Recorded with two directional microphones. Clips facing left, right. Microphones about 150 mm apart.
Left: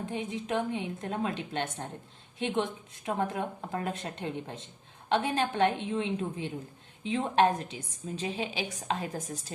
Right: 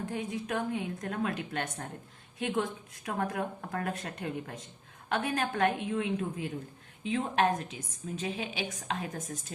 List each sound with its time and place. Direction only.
0.0 s a woman's voice: 20° left (ahead or behind)